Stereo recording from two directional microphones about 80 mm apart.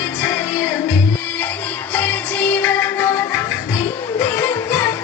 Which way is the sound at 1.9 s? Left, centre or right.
Centre.